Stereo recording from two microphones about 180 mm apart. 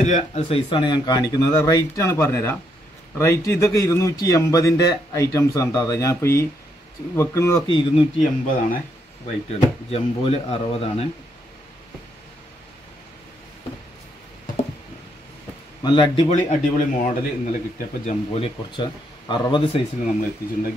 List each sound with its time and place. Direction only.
0.0 s a man's voice: 40° left (ahead or behind); by 7.6 s 15° left (ahead or behind)
7.6 s speech: 30° left (ahead or behind)
8.2 s speech: 50° left (ahead or behind)
9.5 s speech: 35° left (ahead or behind)
15.8 s speech: 25° left (ahead or behind)
16.3 s speech: 40° left (ahead or behind); by 19.8 s 25° left (ahead or behind)